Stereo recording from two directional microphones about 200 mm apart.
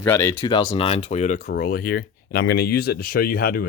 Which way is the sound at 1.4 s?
50° left (ahead or behind).